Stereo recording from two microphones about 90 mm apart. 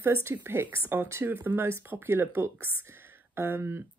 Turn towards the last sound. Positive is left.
turn(degrees=-25)  # may be behind; listen again after turning